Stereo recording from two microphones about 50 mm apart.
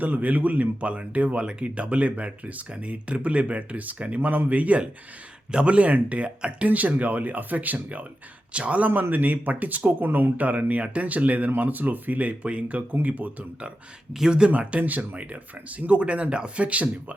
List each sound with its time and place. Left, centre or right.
0.0 s speech: right
8.9 s speech: right
14.1 s speech: centre; by 17.2 s right